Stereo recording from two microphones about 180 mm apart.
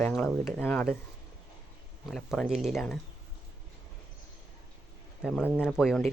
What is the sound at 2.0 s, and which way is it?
Speech, centre (ahead or behind).